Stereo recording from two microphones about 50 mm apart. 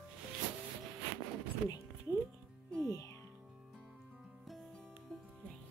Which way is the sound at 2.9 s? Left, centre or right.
Left.